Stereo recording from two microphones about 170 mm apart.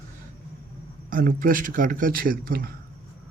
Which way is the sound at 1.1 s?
55° right (ahead or behind).